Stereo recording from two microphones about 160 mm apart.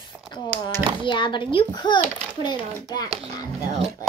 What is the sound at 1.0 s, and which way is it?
A child's voice, 30° left (ahead or behind).